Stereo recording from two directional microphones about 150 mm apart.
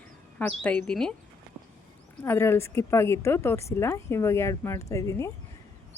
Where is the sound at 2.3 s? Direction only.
15° left (ahead or behind).